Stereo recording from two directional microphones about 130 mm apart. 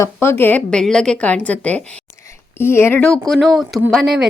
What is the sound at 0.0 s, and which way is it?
A woman's voice, 20° left (ahead or behind).